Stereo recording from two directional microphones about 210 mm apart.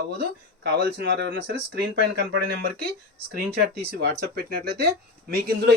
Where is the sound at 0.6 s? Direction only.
55° right (ahead or behind).